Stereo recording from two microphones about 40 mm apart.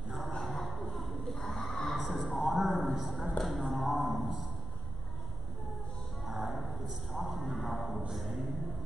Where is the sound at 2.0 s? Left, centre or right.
Centre.